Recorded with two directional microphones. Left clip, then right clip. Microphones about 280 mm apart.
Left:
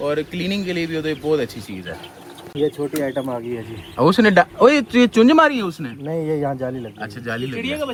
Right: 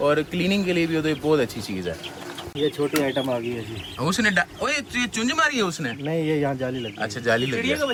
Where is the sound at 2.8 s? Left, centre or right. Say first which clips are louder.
Even; centre.